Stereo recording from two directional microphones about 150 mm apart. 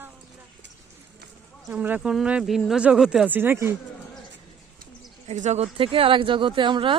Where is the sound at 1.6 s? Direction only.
10° right (ahead or behind).